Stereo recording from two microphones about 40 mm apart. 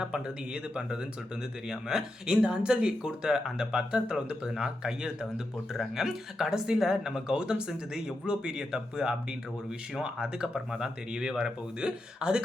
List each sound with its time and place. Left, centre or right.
0.0 s speech: right